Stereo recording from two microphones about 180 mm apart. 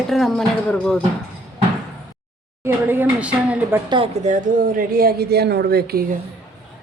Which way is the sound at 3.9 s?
35° right (ahead or behind).